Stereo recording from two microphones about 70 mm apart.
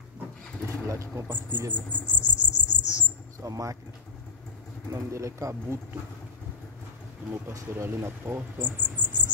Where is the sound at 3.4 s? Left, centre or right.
Right.